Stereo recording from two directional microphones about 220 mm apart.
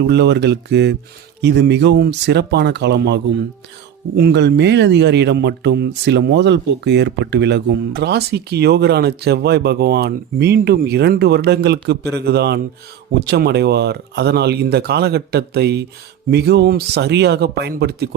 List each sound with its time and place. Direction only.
0.1 s speech: 50° right (ahead or behind)